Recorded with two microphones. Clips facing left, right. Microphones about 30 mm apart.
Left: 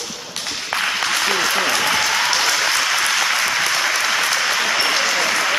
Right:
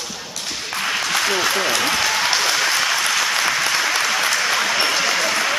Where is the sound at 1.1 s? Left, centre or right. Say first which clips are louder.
Right 1 dB; centre.